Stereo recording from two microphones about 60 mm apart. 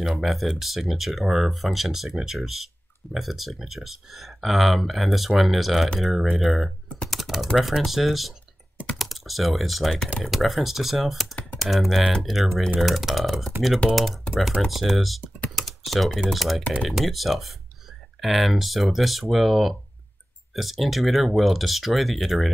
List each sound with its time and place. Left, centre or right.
0.0 s speech: centre
7.1 s typing: centre
7.5 s speech: centre
14.3 s speech: centre